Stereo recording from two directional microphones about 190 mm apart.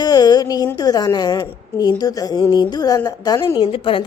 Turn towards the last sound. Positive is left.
turn(degrees=30)  # may be behind; listen again after turning